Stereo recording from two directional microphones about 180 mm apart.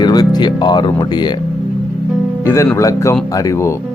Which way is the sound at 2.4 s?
15° left (ahead or behind).